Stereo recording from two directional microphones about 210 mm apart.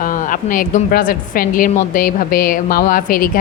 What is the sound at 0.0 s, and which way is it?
A woman's voice, 40° left (ahead or behind).